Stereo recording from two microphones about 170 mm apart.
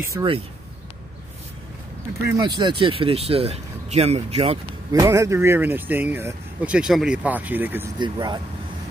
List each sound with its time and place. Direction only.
0.0 s speech: 15° right (ahead or behind)
2.2 s speech: 20° right (ahead or behind)
4.9 s speech: 20° right (ahead or behind)
8.0 s speech: 25° right (ahead or behind)